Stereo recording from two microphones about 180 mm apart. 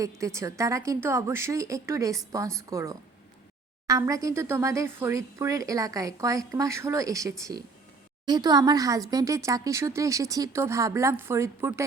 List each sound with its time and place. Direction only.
0.0 s speech: 15° right (ahead or behind)